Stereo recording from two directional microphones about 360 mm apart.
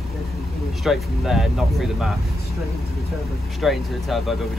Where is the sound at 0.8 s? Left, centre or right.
Centre.